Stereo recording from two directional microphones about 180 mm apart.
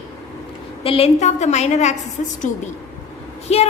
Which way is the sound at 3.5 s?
35° left (ahead or behind).